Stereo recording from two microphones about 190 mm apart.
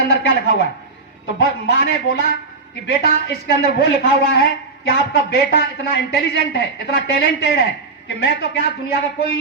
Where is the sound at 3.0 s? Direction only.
55° left (ahead or behind).